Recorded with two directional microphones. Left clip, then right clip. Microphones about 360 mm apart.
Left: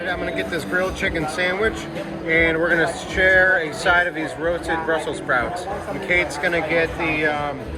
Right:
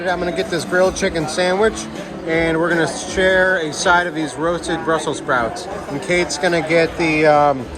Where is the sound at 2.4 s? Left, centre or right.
Centre.